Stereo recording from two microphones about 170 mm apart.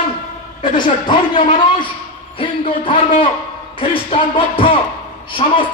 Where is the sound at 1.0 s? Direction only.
30° left (ahead or behind).